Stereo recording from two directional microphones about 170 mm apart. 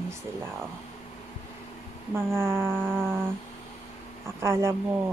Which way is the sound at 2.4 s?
15° right (ahead or behind).